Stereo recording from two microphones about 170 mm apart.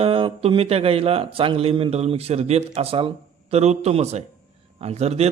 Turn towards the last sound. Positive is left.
turn(degrees=-40)  # may be behind; listen again after turning